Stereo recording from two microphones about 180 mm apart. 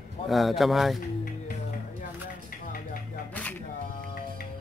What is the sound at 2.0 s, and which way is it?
Dishes, 50° left (ahead or behind).